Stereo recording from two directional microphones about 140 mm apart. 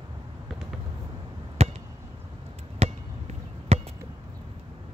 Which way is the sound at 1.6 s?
45° right (ahead or behind).